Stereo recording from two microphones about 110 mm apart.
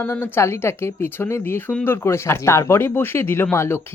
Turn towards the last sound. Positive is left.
turn(degrees=25)  # may be behind; listen again after turning